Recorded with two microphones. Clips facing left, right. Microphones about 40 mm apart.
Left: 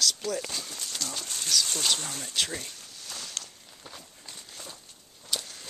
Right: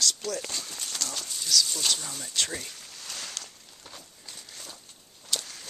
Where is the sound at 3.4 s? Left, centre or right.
Left.